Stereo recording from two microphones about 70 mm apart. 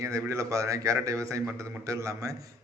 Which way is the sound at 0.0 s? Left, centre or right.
Right.